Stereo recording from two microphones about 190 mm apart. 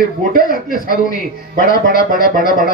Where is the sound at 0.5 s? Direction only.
45° left (ahead or behind).